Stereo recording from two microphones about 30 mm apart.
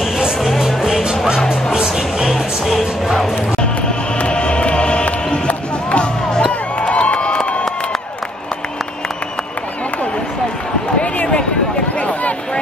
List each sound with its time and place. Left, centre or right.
0.7 s music: centre
2.2 s music: centre
4.2 s music: left
6.8 s a sound: left